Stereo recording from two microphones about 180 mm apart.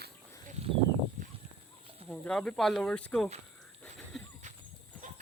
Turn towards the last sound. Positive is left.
turn(degrees=0)  # may be behind; listen again after turning